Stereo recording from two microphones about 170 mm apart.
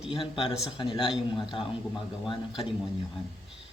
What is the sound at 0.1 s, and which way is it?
A man's voice, 30° left (ahead or behind).